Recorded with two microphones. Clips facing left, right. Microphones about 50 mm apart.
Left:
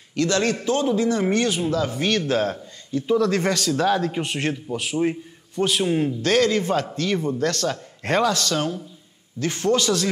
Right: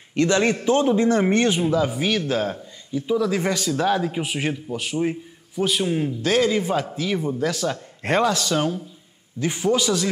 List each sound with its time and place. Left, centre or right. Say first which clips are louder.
0.1 s a man's voice: right 2 dB; right; by 3.5 s centre
3.5 s a man's voice: left 1 dB; right
4.0 s a man's voice: even; centre
6.4 s speech: even; centre
8.0 s a man's voice: right 1 dB; right
8.4 s speech: right 2 dB; centre